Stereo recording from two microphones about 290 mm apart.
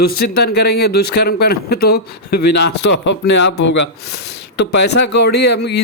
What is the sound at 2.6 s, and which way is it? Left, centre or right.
Speech, left.